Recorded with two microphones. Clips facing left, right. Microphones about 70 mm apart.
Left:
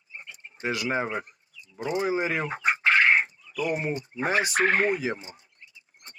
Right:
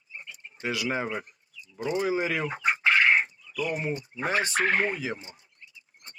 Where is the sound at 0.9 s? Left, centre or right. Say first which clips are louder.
Left 2 dB; centre.